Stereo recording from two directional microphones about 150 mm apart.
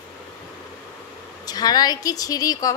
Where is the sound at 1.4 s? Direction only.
25° left (ahead or behind).